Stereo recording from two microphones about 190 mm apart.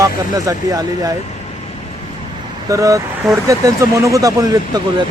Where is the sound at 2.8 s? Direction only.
15° right (ahead or behind).